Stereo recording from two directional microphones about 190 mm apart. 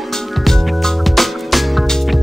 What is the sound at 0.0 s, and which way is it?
Music, centre (ahead or behind).